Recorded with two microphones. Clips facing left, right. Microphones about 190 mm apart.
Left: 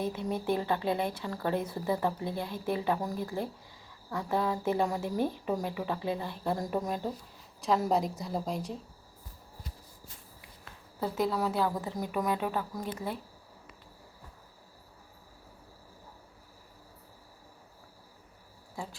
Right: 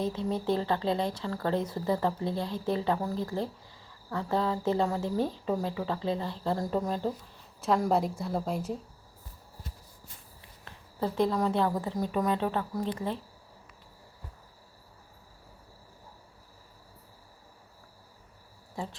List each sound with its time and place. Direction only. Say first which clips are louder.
0.0 s speech: right 2 dB; 15° left (ahead or behind)
2.2 s speech: right 3 dB; 20° right (ahead or behind)
2.5 s speech: even; 10° left (ahead or behind)
7.6 s a woman's voice: right 1 dB; centre (ahead or behind)
11.0 s speech: right 3 dB; 5° left (ahead or behind)